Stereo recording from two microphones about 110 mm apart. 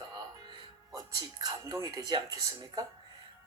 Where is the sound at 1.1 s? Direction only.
40° right (ahead or behind).